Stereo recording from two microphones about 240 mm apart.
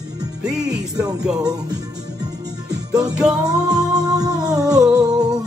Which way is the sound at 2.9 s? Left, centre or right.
Centre.